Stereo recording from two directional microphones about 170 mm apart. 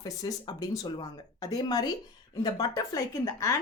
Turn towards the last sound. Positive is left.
turn(degrees=20)  # may be behind; listen again after turning